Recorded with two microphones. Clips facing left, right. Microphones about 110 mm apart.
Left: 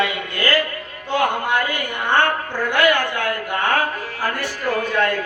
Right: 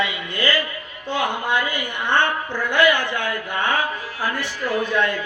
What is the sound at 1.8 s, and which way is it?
A woman's voice, 45° left (ahead or behind).